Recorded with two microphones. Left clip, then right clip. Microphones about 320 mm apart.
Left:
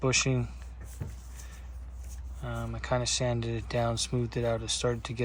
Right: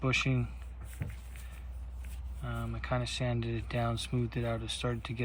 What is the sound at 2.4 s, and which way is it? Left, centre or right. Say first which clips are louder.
Speech: left 3 dB; centre.